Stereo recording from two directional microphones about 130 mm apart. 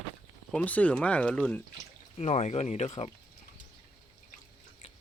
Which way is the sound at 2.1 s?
60° left (ahead or behind).